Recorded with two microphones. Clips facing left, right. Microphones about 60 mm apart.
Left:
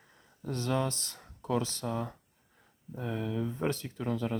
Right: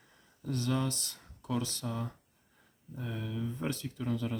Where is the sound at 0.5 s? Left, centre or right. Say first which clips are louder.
Left 1 dB; left.